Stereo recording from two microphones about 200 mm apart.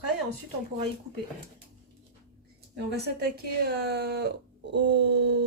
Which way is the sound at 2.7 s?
55° right (ahead or behind).